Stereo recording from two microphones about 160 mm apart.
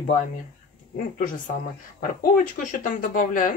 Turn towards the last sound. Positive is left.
turn(degrees=55)  # may be behind; listen again after turning